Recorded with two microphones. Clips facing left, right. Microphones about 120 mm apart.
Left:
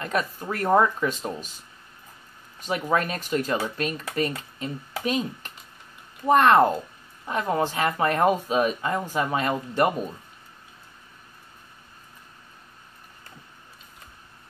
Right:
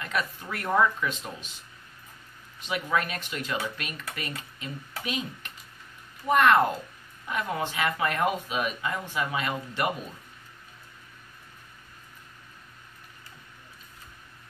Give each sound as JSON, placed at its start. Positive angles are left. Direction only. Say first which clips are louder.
{"t": 0.0, "sound": "speech", "louder": "left 4 dB", "side_deg": 40}
{"t": 2.6, "sound": "speech", "louder": "left 4 dB", "side_deg": 40}